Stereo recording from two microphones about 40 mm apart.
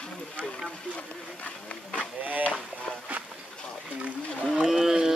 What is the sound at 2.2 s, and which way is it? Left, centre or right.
Speech, right.